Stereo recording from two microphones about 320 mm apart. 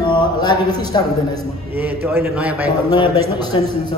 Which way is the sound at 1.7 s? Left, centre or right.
Centre.